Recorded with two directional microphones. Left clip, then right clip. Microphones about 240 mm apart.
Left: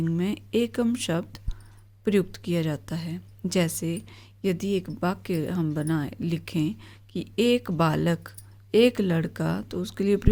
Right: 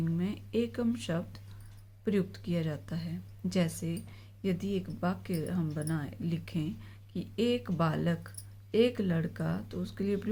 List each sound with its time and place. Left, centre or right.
0.0 s speech: left